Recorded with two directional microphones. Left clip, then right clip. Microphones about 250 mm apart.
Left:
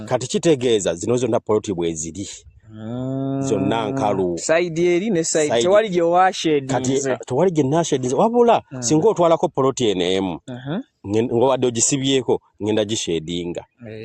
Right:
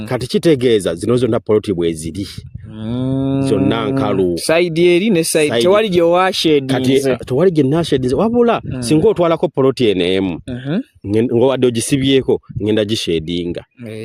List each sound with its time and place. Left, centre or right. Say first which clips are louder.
0.1 s speech: right 4 dB; right